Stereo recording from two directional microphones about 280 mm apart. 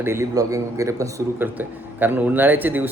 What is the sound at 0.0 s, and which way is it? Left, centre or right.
A man's voice, centre.